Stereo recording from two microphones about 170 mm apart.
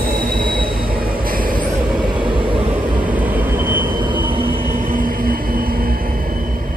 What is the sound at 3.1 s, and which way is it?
Vehicle, 10° right (ahead or behind).